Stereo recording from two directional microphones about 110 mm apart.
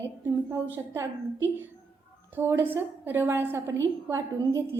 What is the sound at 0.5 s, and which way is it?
Speech, 20° right (ahead or behind).